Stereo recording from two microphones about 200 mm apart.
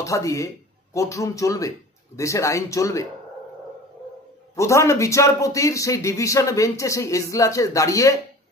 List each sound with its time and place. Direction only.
0.0 s speech: 15° left (ahead or behind)
4.6 s speech: 15° left (ahead or behind)